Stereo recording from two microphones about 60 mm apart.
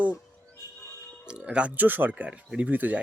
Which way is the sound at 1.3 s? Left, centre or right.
Centre.